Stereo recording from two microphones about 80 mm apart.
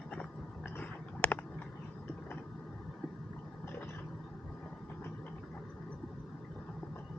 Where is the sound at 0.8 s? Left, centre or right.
Centre.